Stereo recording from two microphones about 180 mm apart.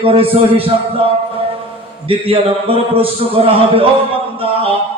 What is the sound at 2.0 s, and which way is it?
A man's voice, 30° right (ahead or behind).